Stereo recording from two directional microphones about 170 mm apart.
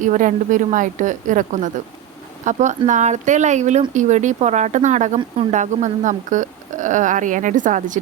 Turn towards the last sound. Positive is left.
turn(degrees=-50)  # may be behind; listen again after turning